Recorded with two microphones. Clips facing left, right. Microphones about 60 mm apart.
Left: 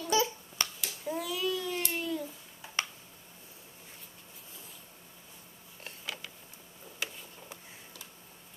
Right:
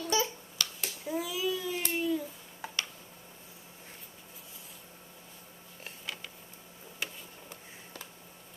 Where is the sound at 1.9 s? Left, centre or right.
Centre.